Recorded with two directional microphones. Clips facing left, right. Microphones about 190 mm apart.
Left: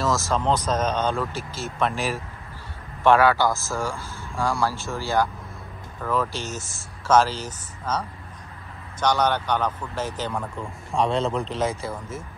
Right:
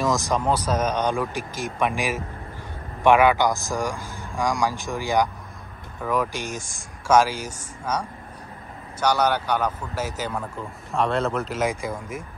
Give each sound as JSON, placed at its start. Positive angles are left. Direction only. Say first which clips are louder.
{"t": 0.0, "sound": "speech", "louder": "right 1 dB", "side_deg": -15}